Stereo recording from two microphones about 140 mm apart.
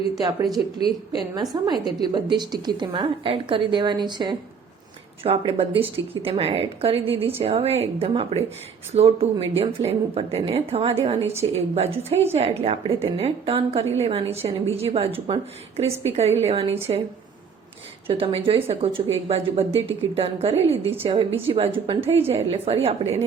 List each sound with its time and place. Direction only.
0.2 s a woman's voice: 25° right (ahead or behind)
5.2 s speech: 45° right (ahead or behind)
18.1 s a woman's voice: 45° right (ahead or behind)